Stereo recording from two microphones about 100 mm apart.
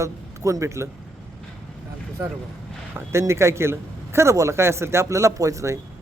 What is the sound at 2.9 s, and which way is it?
Speech, 30° right (ahead or behind).